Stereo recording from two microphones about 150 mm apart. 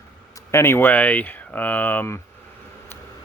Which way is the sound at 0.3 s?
15° left (ahead or behind).